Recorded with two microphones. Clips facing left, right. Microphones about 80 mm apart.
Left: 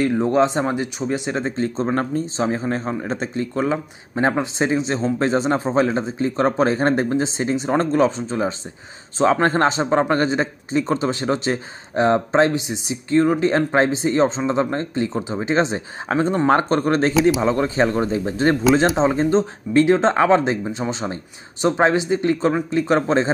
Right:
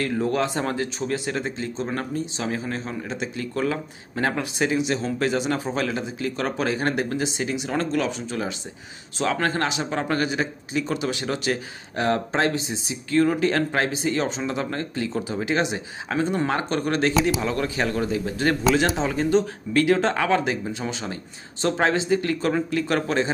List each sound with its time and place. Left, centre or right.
0.0 s speech: left
3.5 s speech: left